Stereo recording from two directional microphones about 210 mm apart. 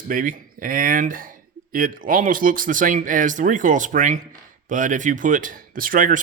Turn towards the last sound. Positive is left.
turn(degrees=-40)  # may be behind; listen again after turning